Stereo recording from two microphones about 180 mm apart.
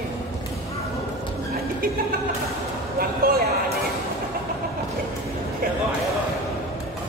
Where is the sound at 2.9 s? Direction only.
55° right (ahead or behind).